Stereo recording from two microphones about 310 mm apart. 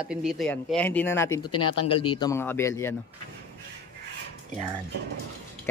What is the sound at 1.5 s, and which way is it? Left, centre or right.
Speech, left.